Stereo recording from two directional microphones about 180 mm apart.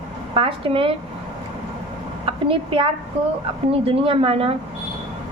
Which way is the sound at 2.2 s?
30° right (ahead or behind).